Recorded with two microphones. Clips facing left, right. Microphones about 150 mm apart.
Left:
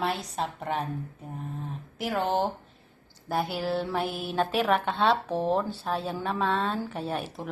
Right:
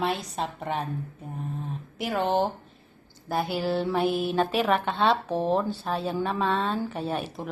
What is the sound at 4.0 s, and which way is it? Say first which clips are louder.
Speech: right 5 dB; 15° right (ahead or behind).